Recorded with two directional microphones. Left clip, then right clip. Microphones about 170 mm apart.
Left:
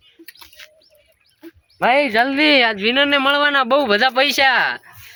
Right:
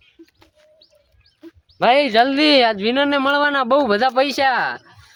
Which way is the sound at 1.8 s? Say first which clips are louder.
Right 1 dB; 90° right.